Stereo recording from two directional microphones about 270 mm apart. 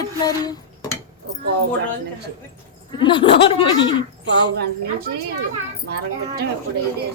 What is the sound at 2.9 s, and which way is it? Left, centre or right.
Speech, centre.